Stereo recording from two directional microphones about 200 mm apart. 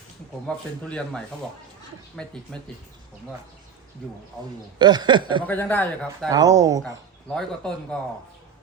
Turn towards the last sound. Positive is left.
turn(degrees=5)  # may be behind; listen again after turning